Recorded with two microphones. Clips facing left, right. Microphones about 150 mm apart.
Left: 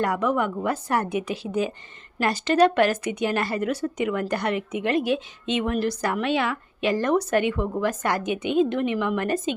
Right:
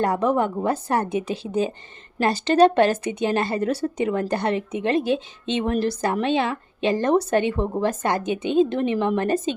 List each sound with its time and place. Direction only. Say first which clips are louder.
0.0 s a woman's voice: right 3 dB; 30° right (ahead or behind)